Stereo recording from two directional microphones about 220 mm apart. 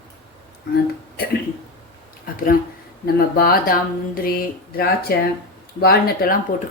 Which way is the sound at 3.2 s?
45° left (ahead or behind).